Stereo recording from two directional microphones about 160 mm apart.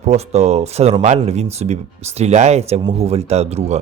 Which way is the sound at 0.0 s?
45° right (ahead or behind).